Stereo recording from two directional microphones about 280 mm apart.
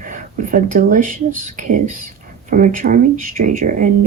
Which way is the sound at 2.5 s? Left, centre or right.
Right.